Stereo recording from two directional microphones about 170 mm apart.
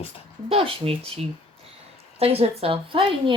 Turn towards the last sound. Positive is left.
turn(degrees=-30)  # may be behind; listen again after turning